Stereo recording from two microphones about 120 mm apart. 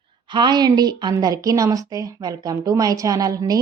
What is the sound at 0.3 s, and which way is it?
A woman's voice, 35° right (ahead or behind).